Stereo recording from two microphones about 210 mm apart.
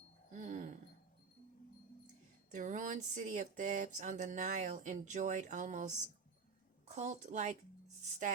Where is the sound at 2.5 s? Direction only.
40° right (ahead or behind).